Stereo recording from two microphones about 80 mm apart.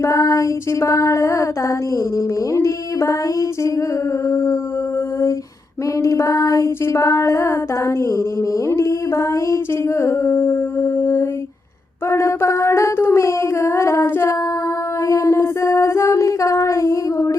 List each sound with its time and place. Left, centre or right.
0.0 s female singing: left
4.3 s female singing: left
6.0 s female singing: left
12.0 s a sound: left